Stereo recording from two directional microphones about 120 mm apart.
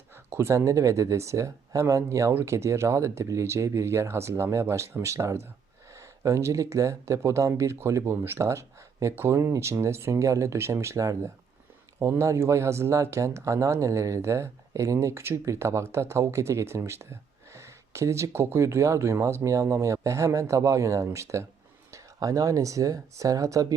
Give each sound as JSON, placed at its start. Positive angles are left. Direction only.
{"t": 0.3, "sound": "speech", "side_deg": -20}